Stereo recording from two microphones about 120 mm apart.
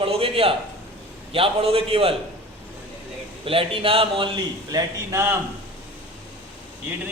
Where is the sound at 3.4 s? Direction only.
50° right (ahead or behind).